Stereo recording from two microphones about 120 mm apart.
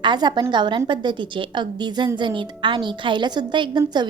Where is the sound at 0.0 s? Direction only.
40° right (ahead or behind).